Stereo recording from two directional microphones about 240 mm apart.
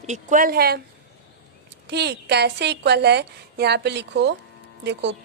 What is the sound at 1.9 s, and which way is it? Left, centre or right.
A woman's voice, right.